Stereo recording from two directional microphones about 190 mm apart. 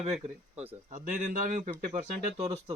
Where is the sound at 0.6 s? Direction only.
35° right (ahead or behind).